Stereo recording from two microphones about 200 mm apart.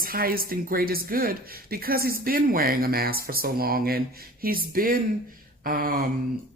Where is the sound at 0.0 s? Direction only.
45° right (ahead or behind).